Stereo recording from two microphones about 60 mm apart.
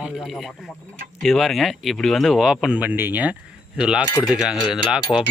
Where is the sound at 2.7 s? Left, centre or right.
Right.